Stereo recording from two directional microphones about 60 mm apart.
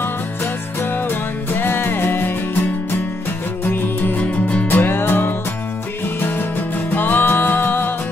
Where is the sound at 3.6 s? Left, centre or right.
Left.